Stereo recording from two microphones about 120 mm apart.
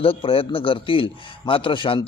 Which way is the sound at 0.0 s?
50° left (ahead or behind).